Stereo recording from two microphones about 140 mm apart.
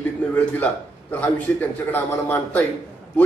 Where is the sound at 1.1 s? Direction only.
15° left (ahead or behind).